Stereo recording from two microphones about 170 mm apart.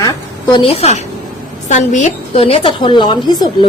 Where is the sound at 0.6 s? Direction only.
35° left (ahead or behind).